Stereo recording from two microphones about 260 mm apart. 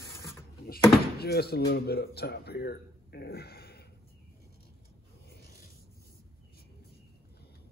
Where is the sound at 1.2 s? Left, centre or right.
Left.